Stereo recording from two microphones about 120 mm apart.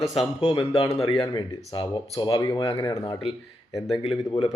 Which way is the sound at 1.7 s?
45° left (ahead or behind).